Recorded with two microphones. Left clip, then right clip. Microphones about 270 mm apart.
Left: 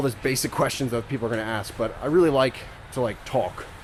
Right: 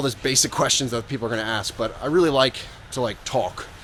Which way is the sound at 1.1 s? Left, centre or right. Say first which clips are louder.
Right 2 dB; right.